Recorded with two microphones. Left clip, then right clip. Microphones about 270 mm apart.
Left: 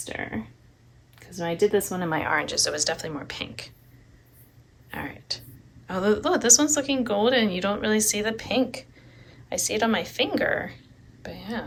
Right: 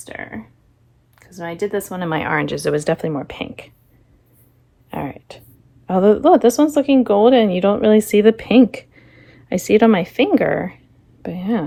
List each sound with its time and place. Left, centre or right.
0.0 s speech: centre
2.0 s a woman's voice: right; by 3.6 s centre
4.9 s a sound: centre
6.3 s a woman's voice: centre